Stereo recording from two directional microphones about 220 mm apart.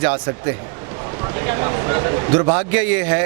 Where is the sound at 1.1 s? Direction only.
20° right (ahead or behind).